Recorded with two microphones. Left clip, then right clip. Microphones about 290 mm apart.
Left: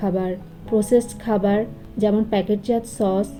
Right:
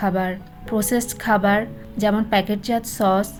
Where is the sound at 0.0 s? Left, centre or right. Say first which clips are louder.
Right 1 dB; right.